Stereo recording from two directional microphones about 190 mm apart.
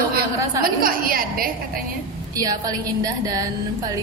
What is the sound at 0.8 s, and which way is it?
Speech, 50° right (ahead or behind).